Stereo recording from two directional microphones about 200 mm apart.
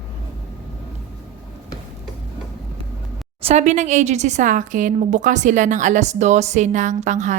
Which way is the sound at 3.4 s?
35° right (ahead or behind).